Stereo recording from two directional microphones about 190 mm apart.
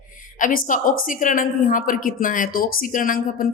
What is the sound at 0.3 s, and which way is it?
A woman's voice, 45° left (ahead or behind).